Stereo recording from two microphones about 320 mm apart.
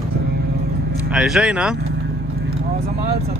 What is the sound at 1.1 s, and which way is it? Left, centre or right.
Speech, centre.